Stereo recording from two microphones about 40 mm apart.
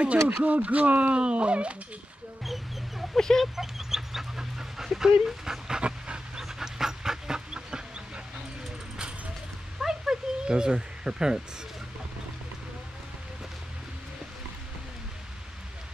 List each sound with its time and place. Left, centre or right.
0.0 s speech: right
1.2 s speech: right
2.4 s wild animals: centre
3.2 s speech: centre
3.5 s speech: centre
5.8 s pant: right
6.4 s dog: centre
9.8 s a sound: centre